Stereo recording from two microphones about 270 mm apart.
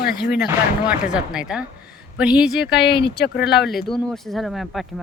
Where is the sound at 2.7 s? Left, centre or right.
Left.